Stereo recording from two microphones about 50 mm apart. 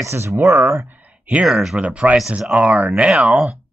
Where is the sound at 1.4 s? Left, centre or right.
Centre.